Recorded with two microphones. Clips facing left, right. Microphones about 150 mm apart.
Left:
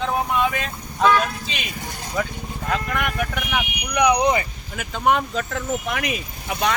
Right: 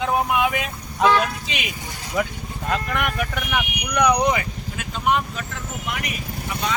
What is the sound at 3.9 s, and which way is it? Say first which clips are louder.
Speech: left 1 dB; 15° left (ahead or behind).